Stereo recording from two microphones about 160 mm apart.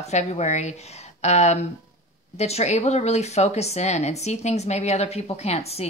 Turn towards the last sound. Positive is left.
turn(degrees=40)  # may be behind; listen again after turning